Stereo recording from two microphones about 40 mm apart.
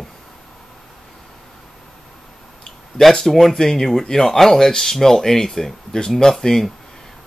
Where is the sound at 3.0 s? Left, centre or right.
Centre.